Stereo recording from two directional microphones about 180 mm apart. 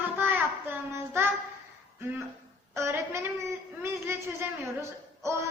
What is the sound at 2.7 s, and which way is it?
A woman's voice, 15° right (ahead or behind).